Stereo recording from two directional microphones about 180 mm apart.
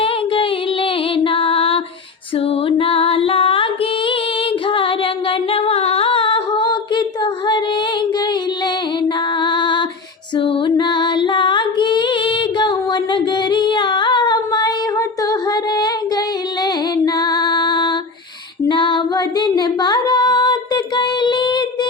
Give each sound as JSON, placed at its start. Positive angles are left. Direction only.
{"t": 0.0, "sound": "music", "side_deg": 30}
{"t": 18.7, "sound": "female singing", "side_deg": 25}